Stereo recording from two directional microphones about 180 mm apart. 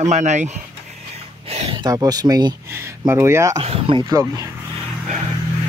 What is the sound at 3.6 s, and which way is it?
Speech, 35° right (ahead or behind).